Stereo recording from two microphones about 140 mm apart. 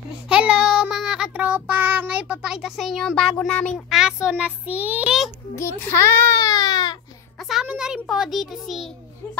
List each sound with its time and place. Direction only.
0.3 s child singing: 5° right (ahead or behind)
3.9 s speech: 5° right (ahead or behind)
5.6 s a child's voice: 15° left (ahead or behind)
7.3 s a sound: centre (ahead or behind)
7.6 s a child's voice: 5° right (ahead or behind)